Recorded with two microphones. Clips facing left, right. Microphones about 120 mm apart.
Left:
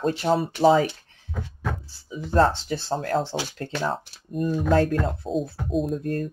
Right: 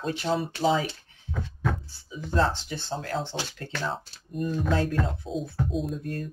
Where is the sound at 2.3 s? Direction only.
40° left (ahead or behind).